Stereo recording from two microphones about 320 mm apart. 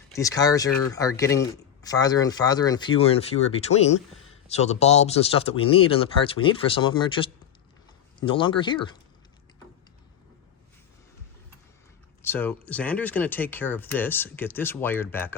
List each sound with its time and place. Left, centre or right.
0.2 s speech: centre
12.2 s speech: centre